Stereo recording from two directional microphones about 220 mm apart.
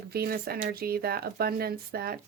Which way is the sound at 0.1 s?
45° right (ahead or behind).